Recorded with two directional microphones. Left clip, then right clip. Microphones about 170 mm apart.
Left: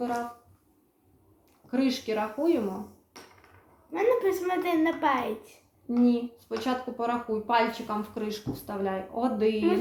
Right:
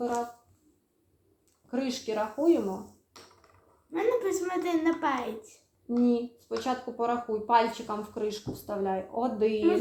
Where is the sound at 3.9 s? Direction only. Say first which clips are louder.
Left 3 dB; 15° left (ahead or behind).